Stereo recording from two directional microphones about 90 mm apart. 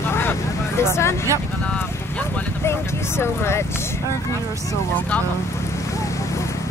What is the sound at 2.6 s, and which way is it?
Speech, 30° left (ahead or behind).